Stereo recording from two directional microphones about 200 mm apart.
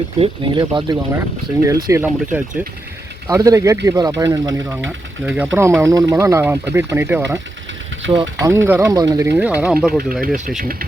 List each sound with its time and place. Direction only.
0.2 s speech: 25° right (ahead or behind)
8.0 s speech: 65° right (ahead or behind)
8.4 s speech: 10° right (ahead or behind)
10.1 s speech: 40° right (ahead or behind)